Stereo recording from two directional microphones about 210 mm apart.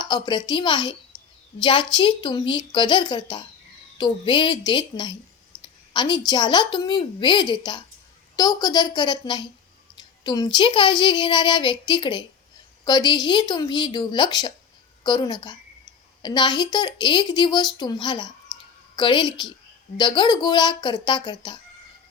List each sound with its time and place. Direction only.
0.0 s a woman's voice: 20° left (ahead or behind)
5.5 s a sound: 5° left (ahead or behind)
5.9 s a woman's voice: 20° left (ahead or behind)